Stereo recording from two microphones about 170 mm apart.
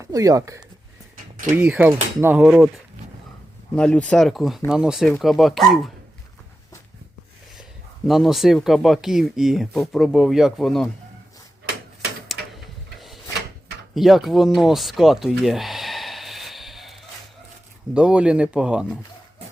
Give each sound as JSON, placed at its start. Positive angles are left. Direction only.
{"t": 0.0, "sound": "speech", "side_deg": -20}
{"t": 3.8, "sound": "speech", "side_deg": 5}
{"t": 8.0, "sound": "speech", "side_deg": 0}
{"t": 12.3, "sound": "tick-tock", "side_deg": 0}
{"t": 13.9, "sound": "bleat", "side_deg": 0}
{"t": 17.9, "sound": "speech", "side_deg": -5}